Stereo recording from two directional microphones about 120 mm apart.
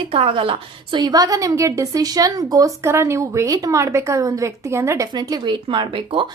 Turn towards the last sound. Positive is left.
turn(degrees=-45)  # may be behind; listen again after turning